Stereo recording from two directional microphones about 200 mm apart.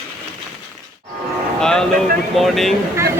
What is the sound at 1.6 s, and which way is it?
Speech, 5° left (ahead or behind).